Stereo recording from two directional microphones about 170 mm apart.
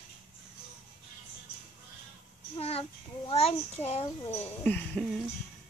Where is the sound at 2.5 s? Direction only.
35° left (ahead or behind).